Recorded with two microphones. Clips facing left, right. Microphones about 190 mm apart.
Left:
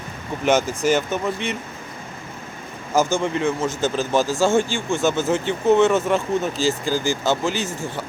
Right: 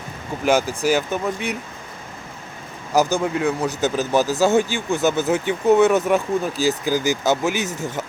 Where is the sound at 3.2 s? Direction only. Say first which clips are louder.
Right 1 dB; 5° right (ahead or behind).